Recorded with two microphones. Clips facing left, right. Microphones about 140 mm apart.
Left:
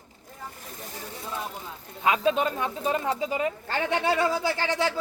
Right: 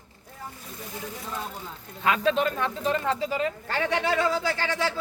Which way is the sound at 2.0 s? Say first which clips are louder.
Even; 15° left (ahead or behind).